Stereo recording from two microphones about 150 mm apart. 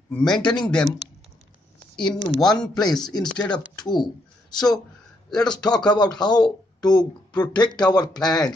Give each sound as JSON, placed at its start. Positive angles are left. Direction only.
{"t": 0.1, "sound": "speech", "side_deg": 5}
{"t": 2.0, "sound": "speech", "side_deg": 30}
{"t": 2.4, "sound": "speech", "side_deg": 5}
{"t": 2.7, "sound": "speech", "side_deg": 25}
{"t": 3.3, "sound": "speech", "side_deg": 5}
{"t": 3.8, "sound": "speech", "side_deg": 30}